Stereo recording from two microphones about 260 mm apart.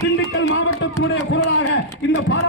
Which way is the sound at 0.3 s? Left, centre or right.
Left.